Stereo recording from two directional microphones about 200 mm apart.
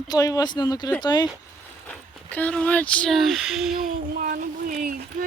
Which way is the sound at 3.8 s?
45° right (ahead or behind).